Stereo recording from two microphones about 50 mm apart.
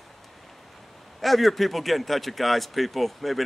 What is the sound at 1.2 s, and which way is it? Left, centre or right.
Speech, centre.